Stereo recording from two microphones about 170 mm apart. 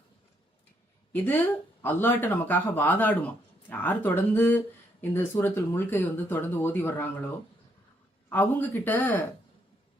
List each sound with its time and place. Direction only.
1.1 s speech: 10° left (ahead or behind)
8.3 s speech: 10° left (ahead or behind)